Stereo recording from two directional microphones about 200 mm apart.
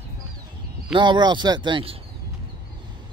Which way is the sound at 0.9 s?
20° right (ahead or behind).